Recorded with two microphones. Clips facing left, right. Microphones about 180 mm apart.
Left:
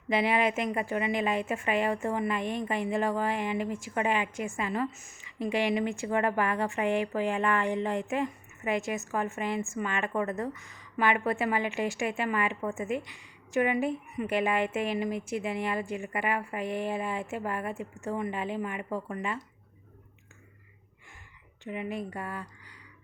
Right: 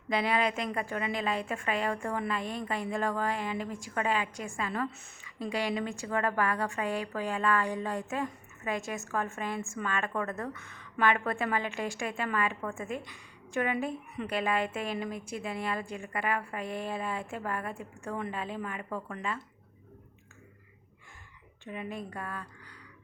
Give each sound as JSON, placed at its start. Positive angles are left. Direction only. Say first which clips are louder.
{"t": 0.2, "sound": "a woman's voice", "louder": "left 2 dB", "side_deg": 15}
{"t": 4.9, "sound": "speech", "louder": "right 1 dB", "side_deg": -65}
{"t": 5.6, "sound": "a woman's voice", "louder": "left 4 dB", "side_deg": 15}
{"t": 10.6, "sound": "speech", "louder": "right 2 dB", "side_deg": -60}
{"t": 10.9, "sound": "a woman's voice", "louder": "left 1 dB", "side_deg": 10}
{"t": 21.7, "sound": "a woman's voice", "louder": "left 4 dB", "side_deg": 15}